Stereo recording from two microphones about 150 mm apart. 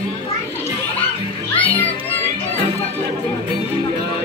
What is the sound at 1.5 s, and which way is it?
Music, 10° left (ahead or behind).